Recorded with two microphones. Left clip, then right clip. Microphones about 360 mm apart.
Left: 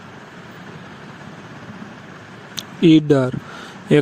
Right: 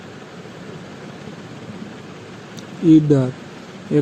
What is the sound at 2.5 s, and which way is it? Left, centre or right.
Speech, left.